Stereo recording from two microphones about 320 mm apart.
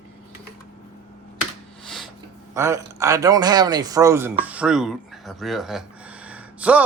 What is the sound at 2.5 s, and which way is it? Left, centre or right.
A man's voice, centre.